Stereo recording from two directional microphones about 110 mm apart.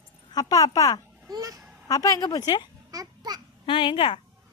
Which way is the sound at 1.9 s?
30° left (ahead or behind).